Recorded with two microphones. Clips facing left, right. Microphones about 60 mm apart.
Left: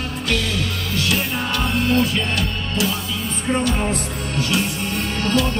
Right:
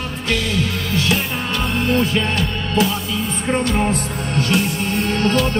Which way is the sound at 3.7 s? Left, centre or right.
Right.